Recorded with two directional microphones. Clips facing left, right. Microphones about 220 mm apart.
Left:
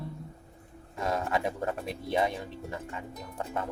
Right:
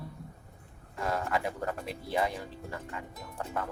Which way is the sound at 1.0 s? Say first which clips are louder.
Left 2 dB; 20° left (ahead or behind).